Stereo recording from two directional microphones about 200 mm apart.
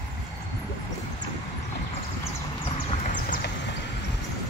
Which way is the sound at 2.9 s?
40° left (ahead or behind).